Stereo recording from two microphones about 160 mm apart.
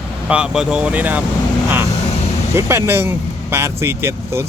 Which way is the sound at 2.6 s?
15° right (ahead or behind).